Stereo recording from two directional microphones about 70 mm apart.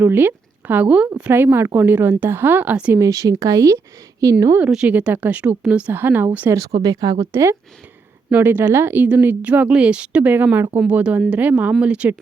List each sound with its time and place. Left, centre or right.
0.0 s speech: right
1.3 s speech: right
3.0 s speech: right
4.6 s speech: centre
5.9 s speech: right
6.5 s speech: right
7.2 s speech: right
8.3 s speech: right